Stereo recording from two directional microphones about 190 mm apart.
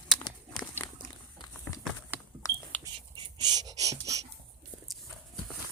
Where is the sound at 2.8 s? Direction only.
25° right (ahead or behind).